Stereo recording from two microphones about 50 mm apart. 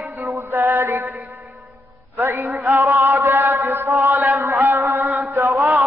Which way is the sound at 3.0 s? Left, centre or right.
Right.